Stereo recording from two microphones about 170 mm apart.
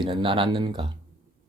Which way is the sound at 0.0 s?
30° right (ahead or behind).